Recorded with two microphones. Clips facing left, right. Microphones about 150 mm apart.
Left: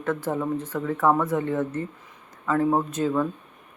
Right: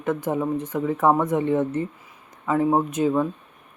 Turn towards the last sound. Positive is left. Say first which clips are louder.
# right 3 dB
turn(degrees=-15)  # may be behind; listen again after turning